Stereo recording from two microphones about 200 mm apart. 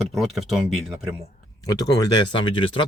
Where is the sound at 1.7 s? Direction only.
20° left (ahead or behind).